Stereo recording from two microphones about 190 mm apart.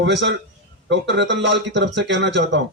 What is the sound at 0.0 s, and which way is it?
A man's voice, 65° right (ahead or behind).